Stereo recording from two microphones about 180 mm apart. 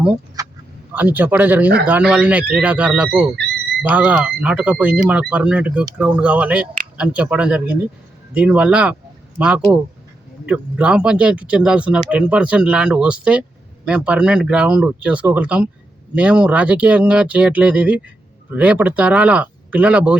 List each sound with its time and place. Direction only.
0.4 s vehicle: 20° right (ahead or behind)
0.9 s speech: 10° right (ahead or behind)
10.4 s speech: 5° right (ahead or behind)